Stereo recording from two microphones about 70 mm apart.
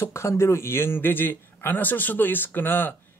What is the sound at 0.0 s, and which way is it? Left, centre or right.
A man's voice, left.